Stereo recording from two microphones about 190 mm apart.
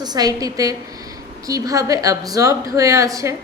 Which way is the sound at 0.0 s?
20° right (ahead or behind).